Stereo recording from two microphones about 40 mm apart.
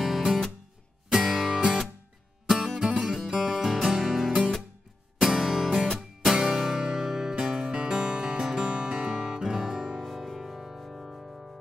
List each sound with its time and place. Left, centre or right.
0.0 s music: centre
5.9 s music: centre
6.3 s music: centre
10.0 s music: centre